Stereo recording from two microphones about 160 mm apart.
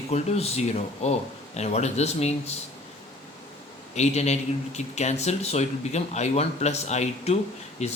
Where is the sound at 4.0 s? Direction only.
45° left (ahead or behind).